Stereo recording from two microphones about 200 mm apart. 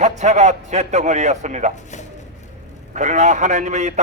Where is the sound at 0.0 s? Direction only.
35° right (ahead or behind).